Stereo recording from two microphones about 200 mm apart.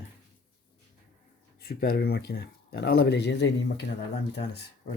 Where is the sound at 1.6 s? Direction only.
50° left (ahead or behind).